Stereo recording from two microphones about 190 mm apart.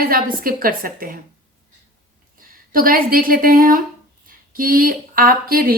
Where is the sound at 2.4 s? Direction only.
50° right (ahead or behind).